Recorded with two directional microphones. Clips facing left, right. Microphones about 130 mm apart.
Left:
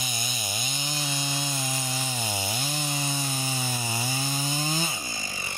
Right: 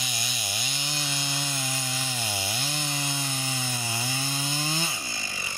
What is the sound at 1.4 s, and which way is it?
Chainsaw, 20° left (ahead or behind).